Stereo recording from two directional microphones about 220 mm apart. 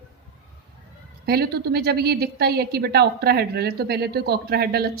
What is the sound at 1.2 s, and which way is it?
A woman's voice, 45° right (ahead or behind).